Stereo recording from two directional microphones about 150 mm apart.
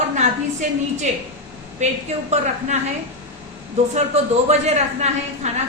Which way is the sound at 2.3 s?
50° right (ahead or behind).